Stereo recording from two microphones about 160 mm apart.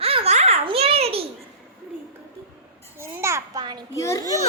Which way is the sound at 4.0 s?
20° left (ahead or behind).